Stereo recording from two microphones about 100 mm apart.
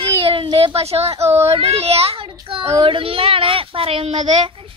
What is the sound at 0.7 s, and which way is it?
A child's voice, 90° right.